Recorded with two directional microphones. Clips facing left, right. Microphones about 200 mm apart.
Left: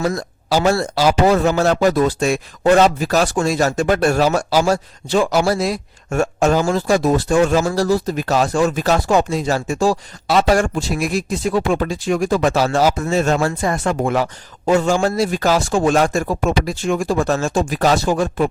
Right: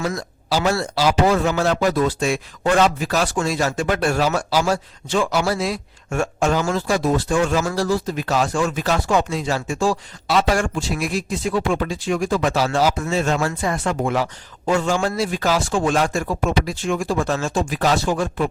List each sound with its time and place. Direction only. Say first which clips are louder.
0.0 s a man's voice: left 4 dB; 40° left (ahead or behind)